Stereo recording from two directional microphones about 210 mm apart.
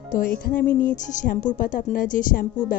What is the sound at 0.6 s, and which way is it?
Music, 5° left (ahead or behind).